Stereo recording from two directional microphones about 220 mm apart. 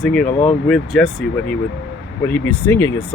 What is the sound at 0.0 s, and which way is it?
Speech, 5° left (ahead or behind).